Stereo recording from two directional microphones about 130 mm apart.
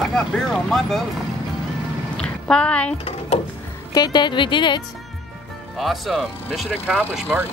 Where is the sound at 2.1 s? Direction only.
5° left (ahead or behind).